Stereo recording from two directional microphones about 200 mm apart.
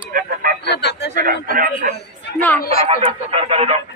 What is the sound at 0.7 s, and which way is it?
Speech, 55° left (ahead or behind).